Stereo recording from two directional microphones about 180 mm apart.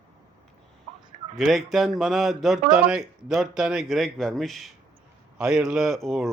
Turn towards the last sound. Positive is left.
turn(degrees=0)  # may be behind; listen again after turning